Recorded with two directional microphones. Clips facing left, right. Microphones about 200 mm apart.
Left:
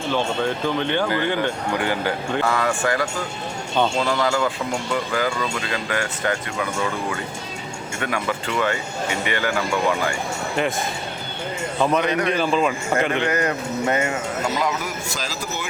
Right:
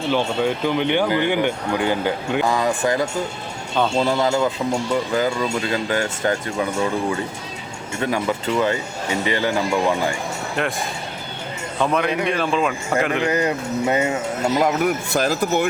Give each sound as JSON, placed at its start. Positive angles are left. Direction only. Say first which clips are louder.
{"t": 0.1, "sound": "speech", "louder": "right 2 dB", "side_deg": -15}
{"t": 8.0, "sound": "speech", "louder": "right 4 dB", "side_deg": -30}
{"t": 11.8, "sound": "a man's voice", "louder": "even", "side_deg": 0}
{"t": 13.3, "sound": "speech", "louder": "right 2 dB", "side_deg": -15}
{"t": 14.6, "sound": "speech", "louder": "right 6 dB", "side_deg": -55}